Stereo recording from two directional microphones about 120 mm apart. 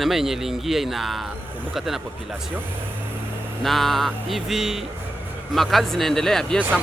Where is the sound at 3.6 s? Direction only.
Centre (ahead or behind).